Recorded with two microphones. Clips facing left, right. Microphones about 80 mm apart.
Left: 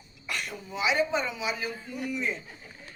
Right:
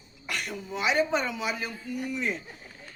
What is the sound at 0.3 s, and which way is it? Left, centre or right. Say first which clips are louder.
Speech: right 2 dB; right.